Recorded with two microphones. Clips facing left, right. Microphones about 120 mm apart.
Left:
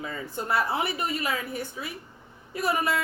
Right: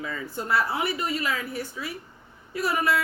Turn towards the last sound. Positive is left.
turn(degrees=25)  # may be behind; listen again after turning